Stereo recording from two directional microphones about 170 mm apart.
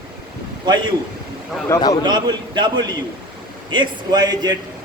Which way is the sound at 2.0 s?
25° right (ahead or behind).